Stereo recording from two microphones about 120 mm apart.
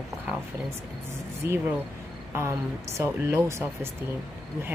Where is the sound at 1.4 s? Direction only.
20° right (ahead or behind).